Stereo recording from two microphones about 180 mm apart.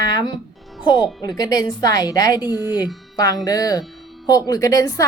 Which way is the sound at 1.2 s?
20° left (ahead or behind).